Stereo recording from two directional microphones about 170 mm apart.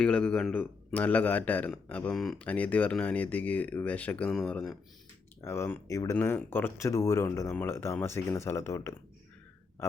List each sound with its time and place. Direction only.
0.0 s a man's voice: 5° left (ahead or behind)
5.4 s a man's voice: 15° left (ahead or behind)